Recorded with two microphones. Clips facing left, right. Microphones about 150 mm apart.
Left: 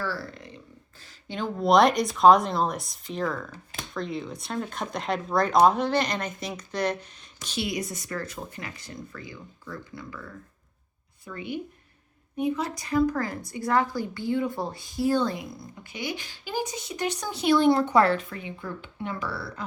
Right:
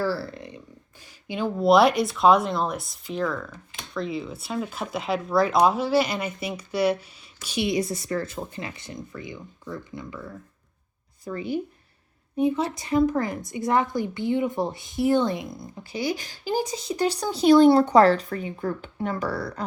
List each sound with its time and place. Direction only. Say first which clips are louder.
0.0 s a sound: right 6 dB; 30° right (ahead or behind)
1.3 s a woman's voice: right 3 dB; 5° right (ahead or behind)
7.7 s a woman's voice: right 6 dB; 30° right (ahead or behind)
11.3 s speech: right 6 dB; 35° right (ahead or behind)
12.4 s a woman's voice: right 4 dB; 25° right (ahead or behind); by 19.6 s 40° right (ahead or behind)